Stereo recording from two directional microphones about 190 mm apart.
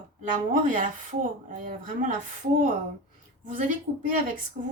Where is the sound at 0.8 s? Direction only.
45° right (ahead or behind).